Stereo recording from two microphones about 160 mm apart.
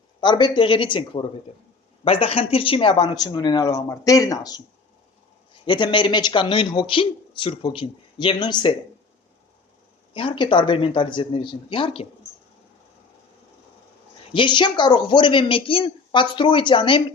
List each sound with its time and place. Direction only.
0.2 s speech: 30° left (ahead or behind)
5.6 s speech: 30° left (ahead or behind)
10.2 s speech: 30° left (ahead or behind)
14.3 s speech: 30° left (ahead or behind)